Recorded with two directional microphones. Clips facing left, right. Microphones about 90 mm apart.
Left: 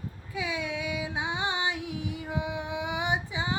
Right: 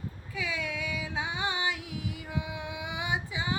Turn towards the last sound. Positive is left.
turn(degrees=25)  # may be behind; listen again after turning